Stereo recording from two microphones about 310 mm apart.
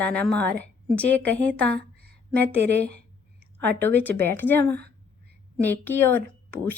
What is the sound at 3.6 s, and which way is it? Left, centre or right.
A woman's voice, centre.